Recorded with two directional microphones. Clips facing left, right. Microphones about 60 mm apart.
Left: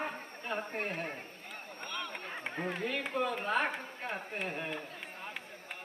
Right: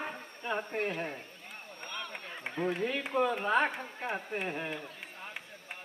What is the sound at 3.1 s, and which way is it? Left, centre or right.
A woman's voice, right.